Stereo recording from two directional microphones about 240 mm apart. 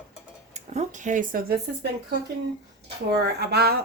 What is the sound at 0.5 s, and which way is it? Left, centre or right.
Speech, right.